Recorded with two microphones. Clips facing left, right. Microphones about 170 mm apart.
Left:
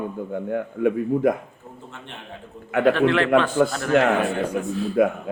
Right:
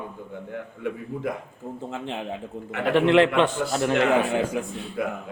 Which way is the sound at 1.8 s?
90° right.